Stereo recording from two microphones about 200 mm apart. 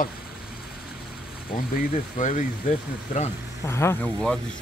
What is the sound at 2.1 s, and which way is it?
Speech, 40° left (ahead or behind).